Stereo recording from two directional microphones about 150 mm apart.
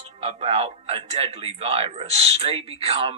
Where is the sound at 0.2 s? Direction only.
45° right (ahead or behind).